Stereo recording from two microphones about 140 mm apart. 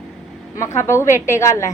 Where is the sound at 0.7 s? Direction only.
20° left (ahead or behind).